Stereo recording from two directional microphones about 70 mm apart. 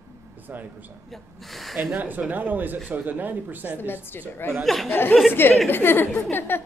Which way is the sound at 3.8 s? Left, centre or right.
Left.